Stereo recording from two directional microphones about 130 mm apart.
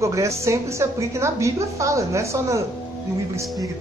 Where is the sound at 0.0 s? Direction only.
25° right (ahead or behind).